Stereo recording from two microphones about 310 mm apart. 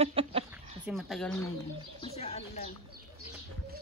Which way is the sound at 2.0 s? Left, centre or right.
Centre.